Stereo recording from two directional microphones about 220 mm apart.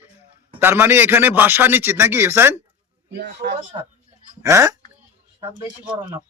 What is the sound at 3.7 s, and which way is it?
Speech, 20° right (ahead or behind).